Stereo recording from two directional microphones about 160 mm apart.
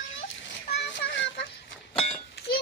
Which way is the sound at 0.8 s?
90° left.